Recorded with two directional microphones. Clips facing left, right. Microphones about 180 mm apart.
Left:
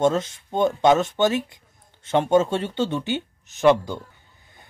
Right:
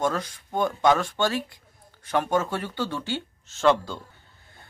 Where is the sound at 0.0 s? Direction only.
25° left (ahead or behind).